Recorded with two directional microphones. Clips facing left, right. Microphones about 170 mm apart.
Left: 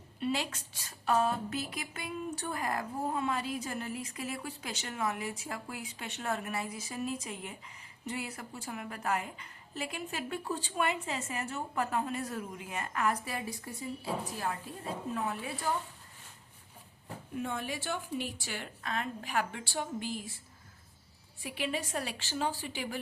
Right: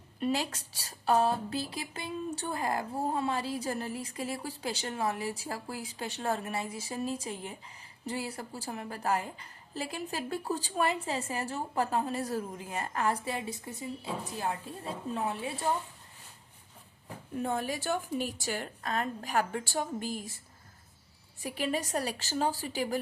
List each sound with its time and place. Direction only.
0.2 s a woman's voice: 40° right (ahead or behind)
17.3 s a woman's voice: 40° right (ahead or behind)
21.4 s a woman's voice: 40° right (ahead or behind)